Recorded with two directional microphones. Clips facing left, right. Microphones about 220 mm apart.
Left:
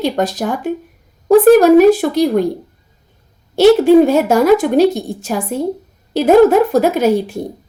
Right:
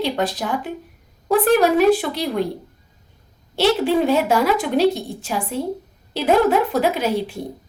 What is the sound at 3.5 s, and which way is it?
A woman's voice, 45° left (ahead or behind).